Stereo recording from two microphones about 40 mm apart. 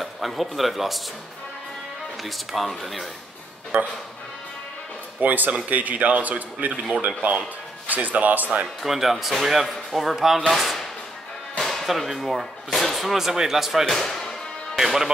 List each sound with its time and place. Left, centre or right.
0.0 s a man's voice: centre
2.2 s speech: centre
3.7 s speech: right
5.2 s speech: right
8.8 s speech: centre
11.6 s music: centre
11.9 s speech: centre
13.8 s speech: centre
14.8 s speech: centre